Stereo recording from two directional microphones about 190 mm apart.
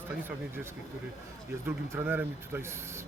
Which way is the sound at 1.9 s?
10° right (ahead or behind).